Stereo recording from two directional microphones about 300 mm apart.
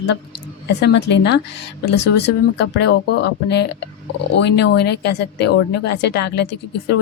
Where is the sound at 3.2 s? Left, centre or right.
Left.